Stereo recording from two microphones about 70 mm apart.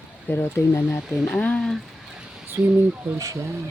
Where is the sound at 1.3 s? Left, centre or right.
Centre.